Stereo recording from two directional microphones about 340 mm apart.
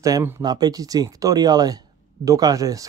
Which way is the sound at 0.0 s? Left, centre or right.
Centre.